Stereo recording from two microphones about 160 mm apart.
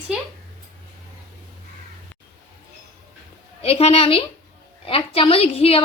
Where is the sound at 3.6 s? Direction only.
40° left (ahead or behind).